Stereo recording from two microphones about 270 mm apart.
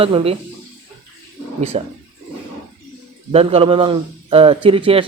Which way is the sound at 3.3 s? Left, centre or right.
Right.